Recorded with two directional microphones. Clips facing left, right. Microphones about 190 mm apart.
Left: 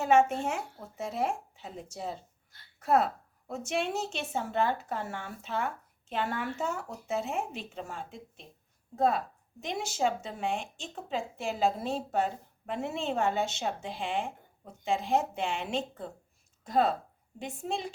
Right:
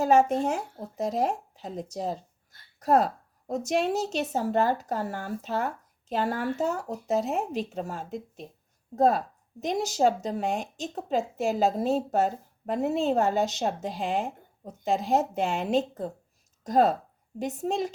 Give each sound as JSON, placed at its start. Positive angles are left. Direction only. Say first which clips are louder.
{"t": 0.0, "sound": "a woman's voice", "louder": "right 3 dB", "side_deg": -35}